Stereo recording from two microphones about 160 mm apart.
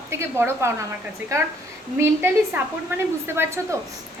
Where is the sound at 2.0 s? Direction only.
10° right (ahead or behind).